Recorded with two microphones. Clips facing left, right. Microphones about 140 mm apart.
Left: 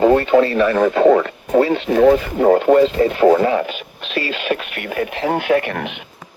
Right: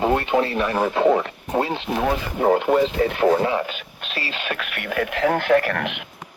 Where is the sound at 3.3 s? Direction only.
65° left (ahead or behind).